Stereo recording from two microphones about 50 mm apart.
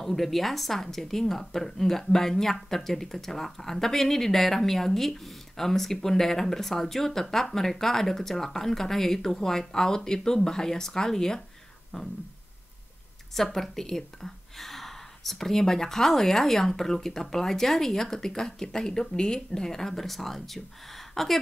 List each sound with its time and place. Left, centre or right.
0.0 s a woman's voice: centre
11.9 s a sound: centre
13.3 s a woman's voice: centre